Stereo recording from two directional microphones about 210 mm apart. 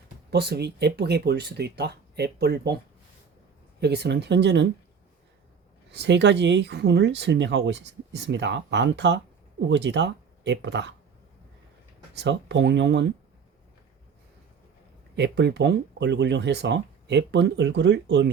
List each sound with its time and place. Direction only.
0.3 s speech: 50° right (ahead or behind)
3.8 s speech: 50° right (ahead or behind)
5.9 s speech: 55° right (ahead or behind)
12.1 s speech: 55° right (ahead or behind)
15.1 s speech: 55° right (ahead or behind)